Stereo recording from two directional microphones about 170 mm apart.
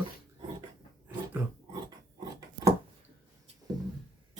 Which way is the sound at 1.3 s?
10° right (ahead or behind).